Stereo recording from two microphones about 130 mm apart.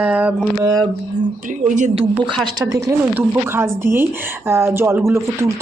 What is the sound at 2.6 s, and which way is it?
Speech, 20° right (ahead or behind).